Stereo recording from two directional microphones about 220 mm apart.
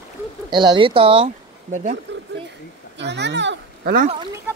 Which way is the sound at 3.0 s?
50° right (ahead or behind).